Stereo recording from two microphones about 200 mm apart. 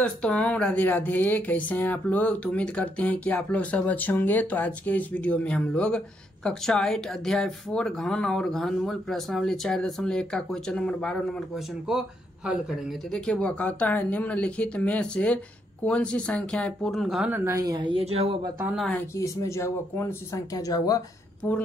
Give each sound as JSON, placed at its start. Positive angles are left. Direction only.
{"t": 0.0, "sound": "speech", "side_deg": 5}
{"t": 18.7, "sound": "speech", "side_deg": 5}
{"t": 19.1, "sound": "speech", "side_deg": 15}